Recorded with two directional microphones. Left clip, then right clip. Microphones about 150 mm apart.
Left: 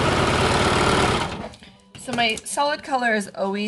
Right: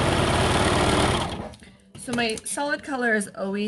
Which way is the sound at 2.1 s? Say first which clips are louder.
Left 5 dB; 25° left (ahead or behind).